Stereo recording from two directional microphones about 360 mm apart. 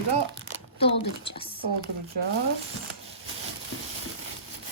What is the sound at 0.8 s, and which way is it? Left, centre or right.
Speech, centre.